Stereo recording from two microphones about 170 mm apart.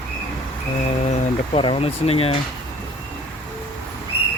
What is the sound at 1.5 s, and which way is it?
Speech, 35° left (ahead or behind).